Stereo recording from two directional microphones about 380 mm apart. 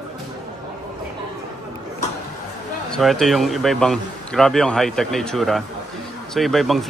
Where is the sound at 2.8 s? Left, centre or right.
Centre.